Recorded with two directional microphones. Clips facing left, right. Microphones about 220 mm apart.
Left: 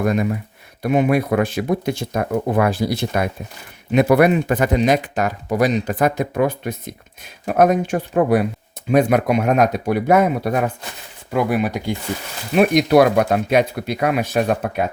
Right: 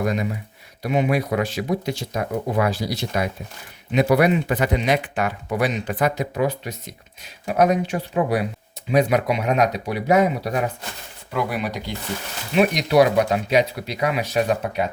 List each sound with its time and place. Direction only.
0.0 s speech: 50° left (ahead or behind)